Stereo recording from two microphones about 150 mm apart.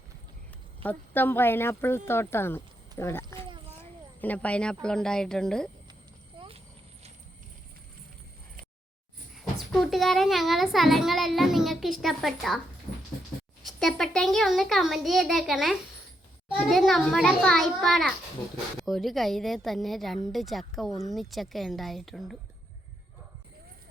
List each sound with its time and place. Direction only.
0.8 s speech: 10° left (ahead or behind)
6.3 s clip-clop: 35° right (ahead or behind)
9.3 s a child's voice: centre (ahead or behind)
13.6 s a child's voice: centre (ahead or behind)